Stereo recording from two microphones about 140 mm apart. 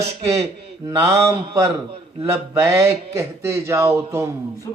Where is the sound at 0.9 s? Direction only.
20° right (ahead or behind).